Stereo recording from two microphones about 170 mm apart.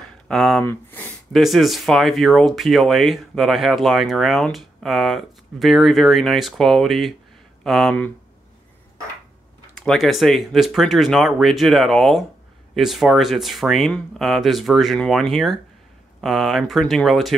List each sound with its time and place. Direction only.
0.3 s speech: 5° left (ahead or behind)
1.3 s speech: centre (ahead or behind)
9.8 s speech: centre (ahead or behind)